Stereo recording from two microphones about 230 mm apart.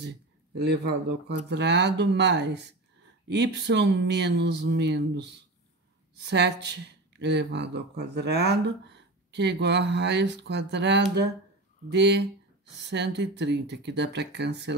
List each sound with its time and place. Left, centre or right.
0.6 s speech: right